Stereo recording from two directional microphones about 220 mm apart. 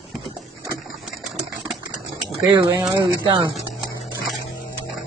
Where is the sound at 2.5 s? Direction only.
20° right (ahead or behind).